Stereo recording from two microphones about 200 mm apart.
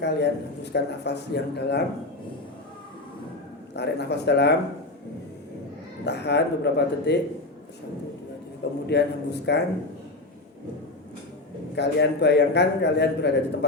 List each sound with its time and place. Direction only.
0.0 s a man's voice: 55° left (ahead or behind)
3.8 s a man's voice: 55° left (ahead or behind)
6.1 s a man's voice: 55° left (ahead or behind)
8.9 s a man's voice: 55° left (ahead or behind)
11.7 s a man's voice: 60° left (ahead or behind)